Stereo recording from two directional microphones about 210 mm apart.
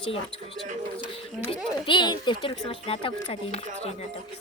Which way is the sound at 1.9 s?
20° left (ahead or behind).